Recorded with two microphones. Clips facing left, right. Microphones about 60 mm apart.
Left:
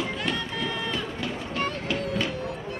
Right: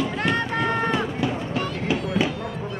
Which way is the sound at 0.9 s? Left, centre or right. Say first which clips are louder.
Right 7 dB; centre.